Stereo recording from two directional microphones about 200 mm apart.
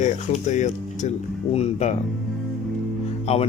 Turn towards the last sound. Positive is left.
turn(degrees=30)  # may be behind; listen again after turning